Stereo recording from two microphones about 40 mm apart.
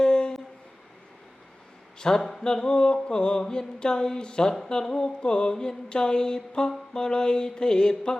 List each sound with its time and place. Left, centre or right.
0.0 s a sound: centre
2.0 s a man's voice: centre
2.4 s mantra: centre